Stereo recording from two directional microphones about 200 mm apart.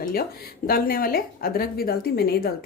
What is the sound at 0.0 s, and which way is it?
Speech, 50° left (ahead or behind).